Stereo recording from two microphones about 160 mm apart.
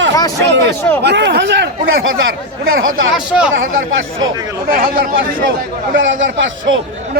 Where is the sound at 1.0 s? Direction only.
90° right.